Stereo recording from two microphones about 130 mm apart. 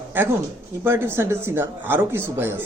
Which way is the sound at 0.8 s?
20° right (ahead or behind).